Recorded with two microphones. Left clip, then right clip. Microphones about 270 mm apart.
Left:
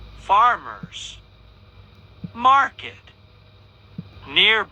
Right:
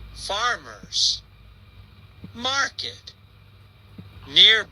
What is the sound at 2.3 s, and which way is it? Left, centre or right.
Speech, centre.